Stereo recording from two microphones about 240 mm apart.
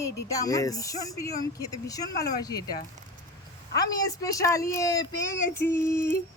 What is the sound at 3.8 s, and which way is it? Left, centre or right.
Speech, centre.